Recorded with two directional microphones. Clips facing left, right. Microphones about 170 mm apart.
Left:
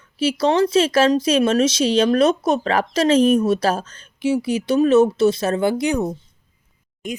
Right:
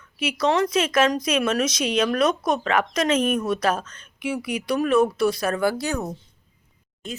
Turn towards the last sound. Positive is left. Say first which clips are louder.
# left 6 dB
turn(degrees=15)  # may be behind; listen again after turning